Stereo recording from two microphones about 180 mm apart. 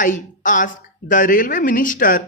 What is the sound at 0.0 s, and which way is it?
A woman's voice, 45° left (ahead or behind).